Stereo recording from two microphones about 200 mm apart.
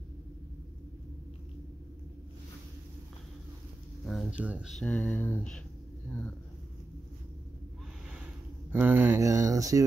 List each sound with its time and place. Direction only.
4.0 s speech: centre (ahead or behind)
8.7 s speech: 10° right (ahead or behind)